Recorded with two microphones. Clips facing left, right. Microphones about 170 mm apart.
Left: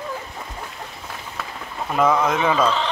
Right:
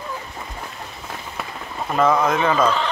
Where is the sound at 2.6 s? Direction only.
5° right (ahead or behind).